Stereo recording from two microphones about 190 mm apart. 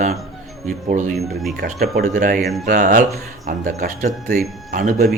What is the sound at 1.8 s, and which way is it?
Speech, 55° right (ahead or behind).